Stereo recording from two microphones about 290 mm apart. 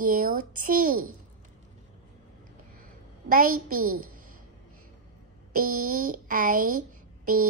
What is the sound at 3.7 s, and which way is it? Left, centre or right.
Speech, right.